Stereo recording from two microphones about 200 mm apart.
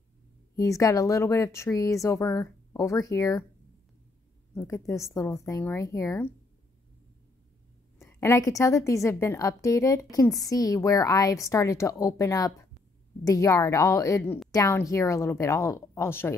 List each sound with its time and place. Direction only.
0.6 s speech: 15° left (ahead or behind)
4.6 s speech: 15° left (ahead or behind)
8.0 s speech: 15° left (ahead or behind)